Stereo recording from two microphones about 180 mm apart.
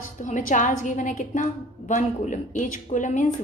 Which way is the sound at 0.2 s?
45° left (ahead or behind).